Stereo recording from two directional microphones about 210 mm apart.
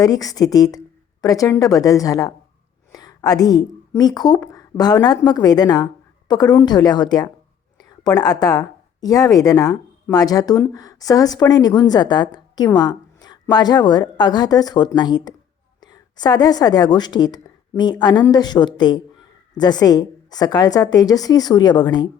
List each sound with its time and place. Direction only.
0.0 s a woman's voice: 15° left (ahead or behind)